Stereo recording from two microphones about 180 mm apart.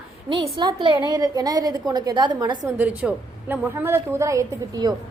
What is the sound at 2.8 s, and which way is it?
A woman's voice, 10° right (ahead or behind).